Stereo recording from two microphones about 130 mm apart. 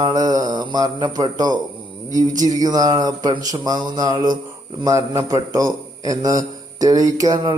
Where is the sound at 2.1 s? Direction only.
30° right (ahead or behind).